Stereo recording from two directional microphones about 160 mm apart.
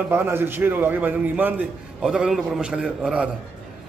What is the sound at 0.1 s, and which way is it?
A man's voice, 15° right (ahead or behind).